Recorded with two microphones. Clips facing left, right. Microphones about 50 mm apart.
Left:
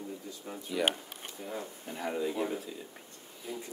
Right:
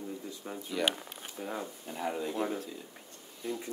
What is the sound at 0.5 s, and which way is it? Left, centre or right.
Speech, centre.